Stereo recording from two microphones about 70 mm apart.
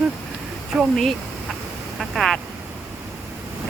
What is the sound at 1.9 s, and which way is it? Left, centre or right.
Speech, centre.